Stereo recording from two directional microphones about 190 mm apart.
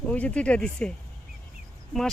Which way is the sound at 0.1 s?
5° left (ahead or behind).